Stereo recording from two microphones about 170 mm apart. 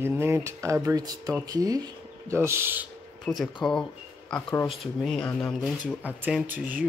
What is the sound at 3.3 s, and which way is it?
Speech, 10° left (ahead or behind).